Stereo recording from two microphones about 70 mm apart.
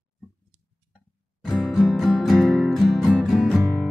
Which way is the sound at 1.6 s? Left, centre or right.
Centre.